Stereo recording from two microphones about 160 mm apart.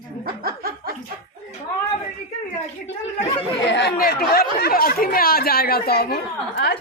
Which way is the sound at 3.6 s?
90° left.